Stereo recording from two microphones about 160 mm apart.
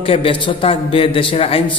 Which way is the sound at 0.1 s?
35° left (ahead or behind).